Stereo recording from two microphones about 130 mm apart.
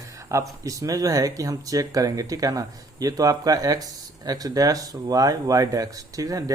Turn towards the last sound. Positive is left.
turn(degrees=-25)  # may be behind; listen again after turning